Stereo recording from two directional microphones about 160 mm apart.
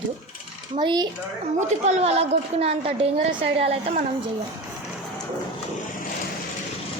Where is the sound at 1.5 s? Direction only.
40° right (ahead or behind).